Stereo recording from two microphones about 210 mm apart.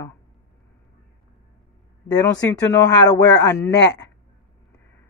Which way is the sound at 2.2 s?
15° left (ahead or behind).